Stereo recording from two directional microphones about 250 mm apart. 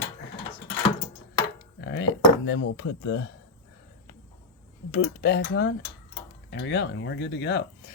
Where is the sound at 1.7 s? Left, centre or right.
Left.